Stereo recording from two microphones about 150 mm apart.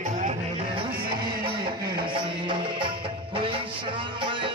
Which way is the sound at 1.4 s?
35° right (ahead or behind).